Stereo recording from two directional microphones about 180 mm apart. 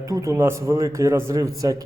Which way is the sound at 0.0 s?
20° right (ahead or behind).